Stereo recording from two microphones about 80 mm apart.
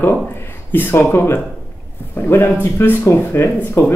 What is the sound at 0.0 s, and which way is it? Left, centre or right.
A man's voice, left.